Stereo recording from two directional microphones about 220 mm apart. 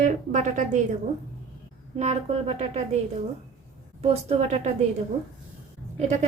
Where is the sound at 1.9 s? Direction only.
30° right (ahead or behind).